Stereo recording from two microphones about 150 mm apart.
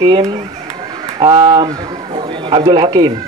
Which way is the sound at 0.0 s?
35° right (ahead or behind).